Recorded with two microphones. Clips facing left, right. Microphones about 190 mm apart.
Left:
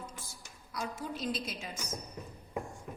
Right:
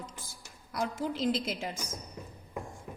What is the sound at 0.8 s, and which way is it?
Speech, 90° right.